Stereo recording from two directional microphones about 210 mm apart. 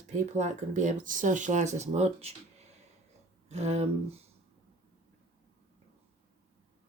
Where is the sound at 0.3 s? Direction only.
35° right (ahead or behind).